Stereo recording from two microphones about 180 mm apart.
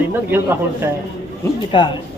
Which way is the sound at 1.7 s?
25° left (ahead or behind).